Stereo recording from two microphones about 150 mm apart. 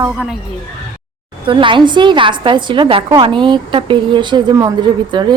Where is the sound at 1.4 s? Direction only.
35° right (ahead or behind).